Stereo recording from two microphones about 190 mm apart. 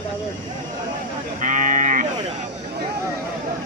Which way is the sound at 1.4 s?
45° right (ahead or behind).